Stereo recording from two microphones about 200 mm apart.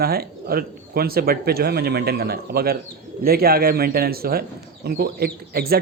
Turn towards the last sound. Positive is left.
turn(degrees=-50)  # may be behind; listen again after turning